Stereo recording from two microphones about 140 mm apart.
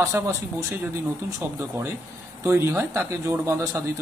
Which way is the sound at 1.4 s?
10° right (ahead or behind).